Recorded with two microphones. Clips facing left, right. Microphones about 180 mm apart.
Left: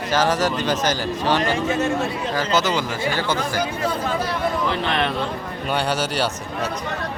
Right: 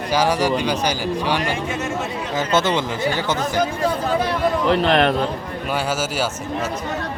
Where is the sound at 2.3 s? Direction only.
25° right (ahead or behind).